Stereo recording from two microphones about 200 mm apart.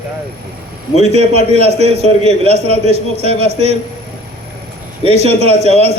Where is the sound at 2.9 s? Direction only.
30° right (ahead or behind).